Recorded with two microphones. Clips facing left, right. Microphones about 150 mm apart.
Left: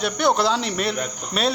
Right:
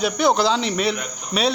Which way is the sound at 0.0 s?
Centre (ahead or behind).